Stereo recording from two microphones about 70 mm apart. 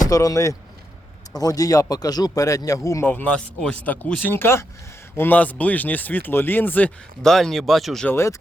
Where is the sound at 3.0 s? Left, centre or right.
Left.